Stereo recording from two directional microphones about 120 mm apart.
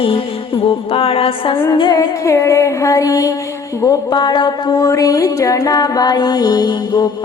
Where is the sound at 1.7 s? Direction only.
35° left (ahead or behind).